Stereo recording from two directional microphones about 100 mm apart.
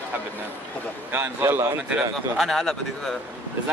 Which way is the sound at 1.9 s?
Centre (ahead or behind).